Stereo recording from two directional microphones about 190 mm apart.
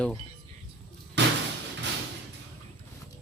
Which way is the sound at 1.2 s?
65° right (ahead or behind).